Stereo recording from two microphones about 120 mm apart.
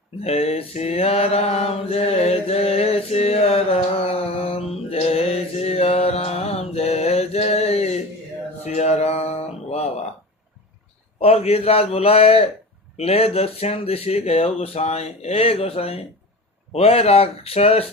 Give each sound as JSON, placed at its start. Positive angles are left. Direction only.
{"t": 0.2, "sound": "mantra", "side_deg": 60}
{"t": 8.6, "sound": "a sound", "side_deg": 65}
{"t": 11.2, "sound": "speech", "side_deg": 55}